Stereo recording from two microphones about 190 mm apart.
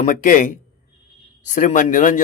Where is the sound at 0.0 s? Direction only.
40° left (ahead or behind).